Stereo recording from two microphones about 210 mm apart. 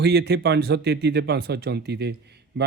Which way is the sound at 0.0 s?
50° right (ahead or behind).